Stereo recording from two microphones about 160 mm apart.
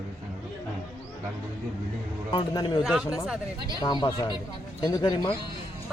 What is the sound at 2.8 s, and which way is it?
Speech, 5° right (ahead or behind).